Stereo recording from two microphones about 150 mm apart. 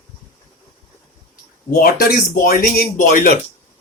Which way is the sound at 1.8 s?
75° left (ahead or behind).